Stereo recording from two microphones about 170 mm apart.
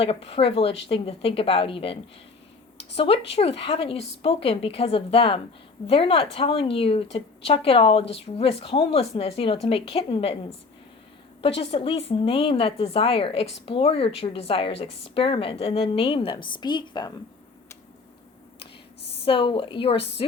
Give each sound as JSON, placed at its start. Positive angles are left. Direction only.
{"t": 0.0, "sound": "a woman's voice", "side_deg": 35}
{"t": 11.4, "sound": "a woman's voice", "side_deg": 35}
{"t": 19.2, "sound": "a woman's voice", "side_deg": 30}